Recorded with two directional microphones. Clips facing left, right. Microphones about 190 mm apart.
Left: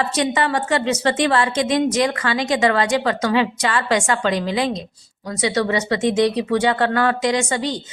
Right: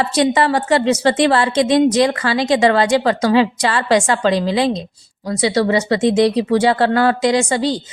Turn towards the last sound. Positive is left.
turn(degrees=-35)  # may be behind; listen again after turning